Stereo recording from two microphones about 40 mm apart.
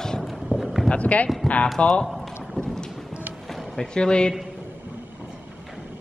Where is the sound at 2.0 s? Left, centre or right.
Centre.